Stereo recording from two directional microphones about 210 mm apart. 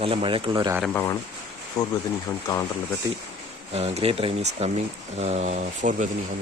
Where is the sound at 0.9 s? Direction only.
10° left (ahead or behind).